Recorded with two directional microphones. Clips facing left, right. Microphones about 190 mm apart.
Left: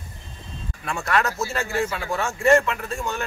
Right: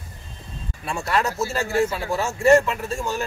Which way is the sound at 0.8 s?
25° right (ahead or behind).